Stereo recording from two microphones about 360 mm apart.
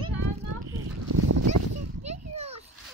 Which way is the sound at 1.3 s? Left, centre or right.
Right.